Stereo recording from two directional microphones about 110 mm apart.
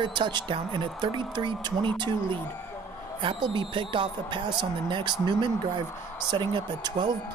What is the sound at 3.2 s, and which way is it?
Speech, 45° right (ahead or behind).